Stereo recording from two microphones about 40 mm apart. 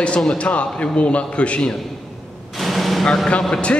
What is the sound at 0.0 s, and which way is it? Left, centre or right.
A man's voice, left.